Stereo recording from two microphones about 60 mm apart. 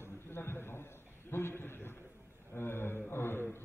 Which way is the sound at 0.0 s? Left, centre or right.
Left.